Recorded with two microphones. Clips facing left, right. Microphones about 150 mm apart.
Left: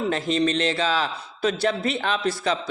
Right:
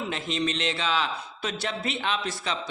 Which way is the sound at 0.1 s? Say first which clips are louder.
Left 6 dB; 40° left (ahead or behind).